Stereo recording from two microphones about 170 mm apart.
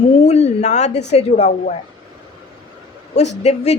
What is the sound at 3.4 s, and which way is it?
Speech, 40° left (ahead or behind).